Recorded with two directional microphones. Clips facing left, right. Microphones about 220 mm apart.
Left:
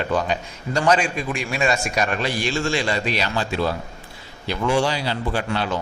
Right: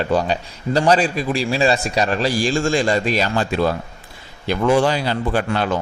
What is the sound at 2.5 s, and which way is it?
A man's voice, 45° right (ahead or behind).